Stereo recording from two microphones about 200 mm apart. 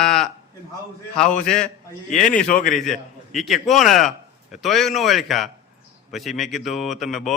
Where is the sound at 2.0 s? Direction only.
40° left (ahead or behind).